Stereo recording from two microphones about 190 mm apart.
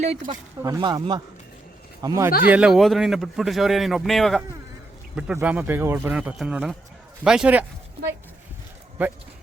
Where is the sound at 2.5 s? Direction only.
5° right (ahead or behind).